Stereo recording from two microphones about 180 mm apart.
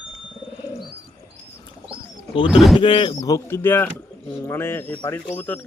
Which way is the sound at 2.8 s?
30° left (ahead or behind).